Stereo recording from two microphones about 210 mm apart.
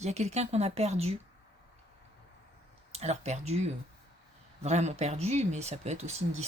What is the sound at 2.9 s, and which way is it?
Speech, 30° right (ahead or behind).